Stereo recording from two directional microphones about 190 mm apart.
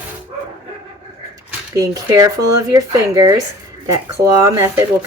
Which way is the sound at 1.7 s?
20° right (ahead or behind).